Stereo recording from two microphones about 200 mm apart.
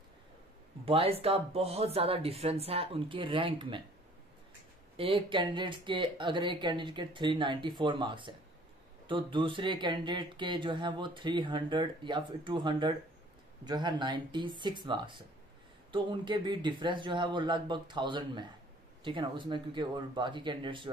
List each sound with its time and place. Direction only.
0.8 s speech: 30° right (ahead or behind)
4.9 s speech: 25° right (ahead or behind)